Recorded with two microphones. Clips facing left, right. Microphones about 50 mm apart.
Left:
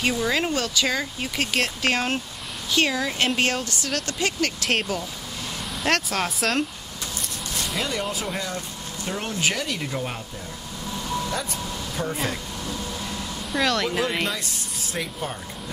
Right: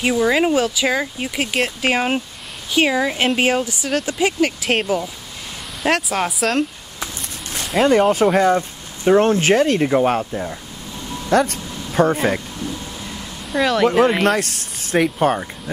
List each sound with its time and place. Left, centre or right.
0.0 s speech: centre
7.6 s a sound: centre
8.3 s speech: right
11.2 s music: right
13.5 s speech: centre
14.2 s speech: right